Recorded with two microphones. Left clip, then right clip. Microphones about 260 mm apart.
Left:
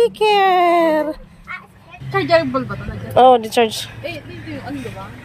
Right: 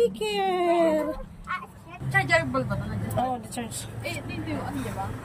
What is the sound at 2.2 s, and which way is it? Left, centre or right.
Speech, centre.